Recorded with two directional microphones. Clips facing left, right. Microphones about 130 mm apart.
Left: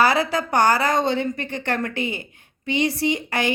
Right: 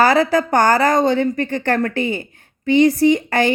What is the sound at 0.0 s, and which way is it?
A woman's voice, 45° right (ahead or behind).